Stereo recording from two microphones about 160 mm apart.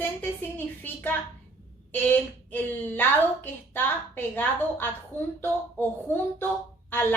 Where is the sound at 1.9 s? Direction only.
10° left (ahead or behind).